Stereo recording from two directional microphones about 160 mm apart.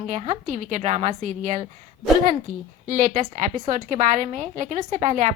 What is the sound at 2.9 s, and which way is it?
A woman's voice, 55° right (ahead or behind).